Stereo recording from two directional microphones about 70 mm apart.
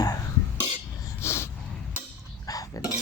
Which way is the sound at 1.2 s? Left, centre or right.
Left.